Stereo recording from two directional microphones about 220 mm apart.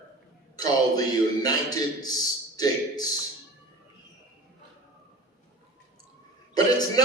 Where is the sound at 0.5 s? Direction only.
15° left (ahead or behind).